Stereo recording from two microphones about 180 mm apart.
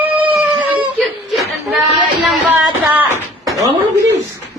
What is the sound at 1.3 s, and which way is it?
Chuckle, centre (ahead or behind).